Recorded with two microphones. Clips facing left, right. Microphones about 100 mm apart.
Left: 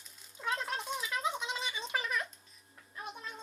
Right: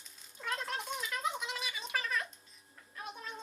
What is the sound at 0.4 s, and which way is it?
Mechanisms, 15° left (ahead or behind).